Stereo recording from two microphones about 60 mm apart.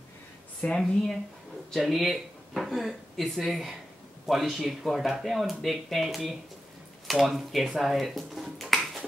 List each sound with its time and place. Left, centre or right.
0.6 s speech: left
1.7 s speech: centre